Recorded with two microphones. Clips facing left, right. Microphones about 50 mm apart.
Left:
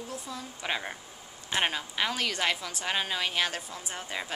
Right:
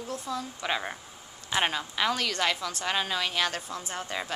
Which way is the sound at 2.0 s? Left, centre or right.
Centre.